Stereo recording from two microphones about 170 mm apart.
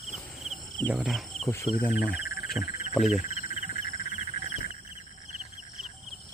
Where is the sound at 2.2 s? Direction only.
60° left (ahead or behind).